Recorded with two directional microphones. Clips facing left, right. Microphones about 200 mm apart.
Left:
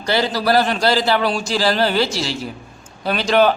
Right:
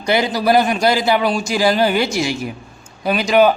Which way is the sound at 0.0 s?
15° right (ahead or behind).